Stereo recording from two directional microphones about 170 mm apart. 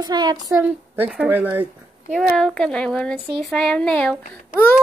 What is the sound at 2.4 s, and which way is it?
A woman's voice, 5° left (ahead or behind).